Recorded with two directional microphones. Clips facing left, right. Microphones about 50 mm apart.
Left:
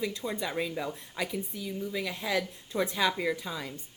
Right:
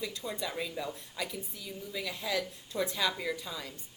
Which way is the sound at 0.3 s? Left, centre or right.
Left.